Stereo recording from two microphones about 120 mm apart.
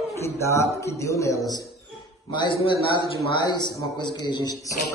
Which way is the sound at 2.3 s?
40° left (ahead or behind).